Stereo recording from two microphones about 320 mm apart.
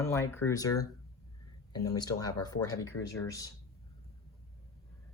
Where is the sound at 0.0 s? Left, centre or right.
Centre.